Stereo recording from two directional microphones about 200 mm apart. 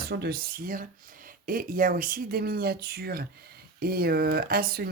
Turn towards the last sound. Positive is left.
turn(degrees=-50)  # may be behind; listen again after turning